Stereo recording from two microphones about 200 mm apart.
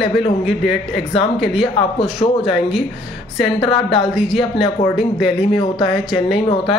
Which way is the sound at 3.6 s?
25° left (ahead or behind).